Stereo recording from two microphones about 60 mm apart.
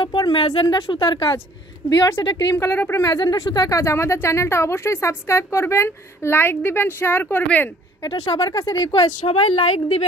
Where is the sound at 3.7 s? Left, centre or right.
Left.